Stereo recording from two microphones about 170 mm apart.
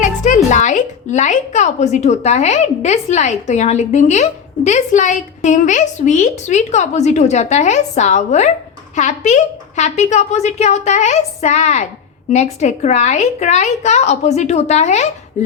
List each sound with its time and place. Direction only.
0.0 s a woman's voice: 45° left (ahead or behind)